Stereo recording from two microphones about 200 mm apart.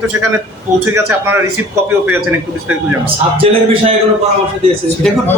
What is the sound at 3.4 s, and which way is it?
Speech, 30° right (ahead or behind).